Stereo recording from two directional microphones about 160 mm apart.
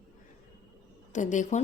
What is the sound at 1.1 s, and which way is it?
Speech, 50° left (ahead or behind).